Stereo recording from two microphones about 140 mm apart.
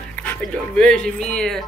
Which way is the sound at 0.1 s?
10° left (ahead or behind).